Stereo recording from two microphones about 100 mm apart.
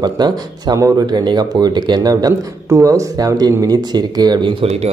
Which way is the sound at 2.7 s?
30° right (ahead or behind).